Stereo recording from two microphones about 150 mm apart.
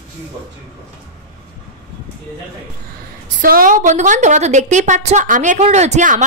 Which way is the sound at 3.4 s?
70° right (ahead or behind).